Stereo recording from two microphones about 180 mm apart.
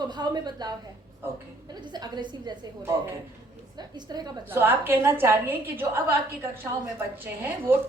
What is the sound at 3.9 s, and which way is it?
Speech, 25° right (ahead or behind).